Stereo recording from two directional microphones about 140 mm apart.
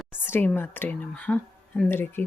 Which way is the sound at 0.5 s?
15° left (ahead or behind).